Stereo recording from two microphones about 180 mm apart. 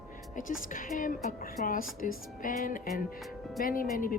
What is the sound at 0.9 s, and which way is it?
Speech, 45° left (ahead or behind).